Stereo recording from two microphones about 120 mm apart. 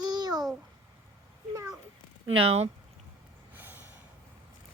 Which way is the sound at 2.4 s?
55° right (ahead or behind).